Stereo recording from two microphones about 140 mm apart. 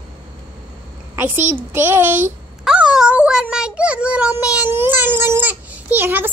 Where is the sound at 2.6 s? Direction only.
5° right (ahead or behind).